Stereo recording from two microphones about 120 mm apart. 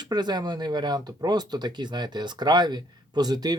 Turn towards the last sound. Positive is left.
turn(degrees=-35)  # may be behind; listen again after turning